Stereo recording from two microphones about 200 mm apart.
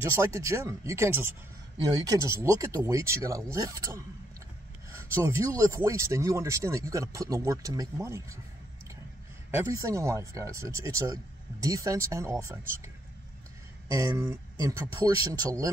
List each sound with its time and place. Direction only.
0.0 s speech: 15° right (ahead or behind)
9.5 s speech: 15° right (ahead or behind)